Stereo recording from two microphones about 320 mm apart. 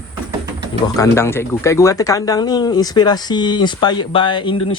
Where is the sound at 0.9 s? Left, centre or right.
Centre.